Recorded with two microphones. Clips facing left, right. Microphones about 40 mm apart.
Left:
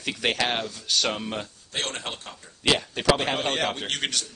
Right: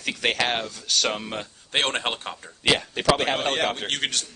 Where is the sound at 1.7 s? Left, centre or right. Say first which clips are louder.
Right 7 dB; right.